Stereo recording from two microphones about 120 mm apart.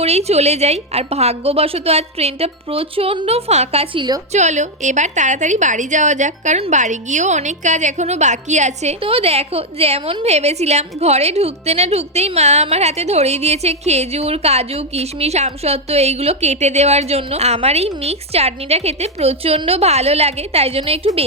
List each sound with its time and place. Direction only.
0.0 s a woman's voice: 60° right (ahead or behind)
4.3 s a woman's voice: 75° right (ahead or behind); by 21.1 s 55° right (ahead or behind)